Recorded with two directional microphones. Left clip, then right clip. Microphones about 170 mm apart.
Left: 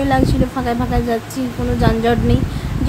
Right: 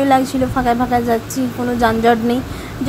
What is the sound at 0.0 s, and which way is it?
A woman's voice, 15° right (ahead or behind).